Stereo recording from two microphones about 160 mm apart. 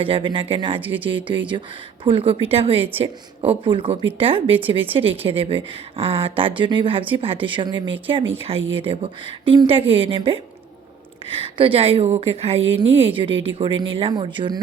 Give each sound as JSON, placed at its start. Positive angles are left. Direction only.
{"t": 0.0, "sound": "a woman's voice", "side_deg": -35}
{"t": 11.5, "sound": "a woman's voice", "side_deg": -35}